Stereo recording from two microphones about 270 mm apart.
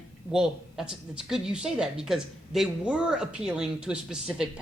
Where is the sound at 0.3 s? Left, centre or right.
Centre.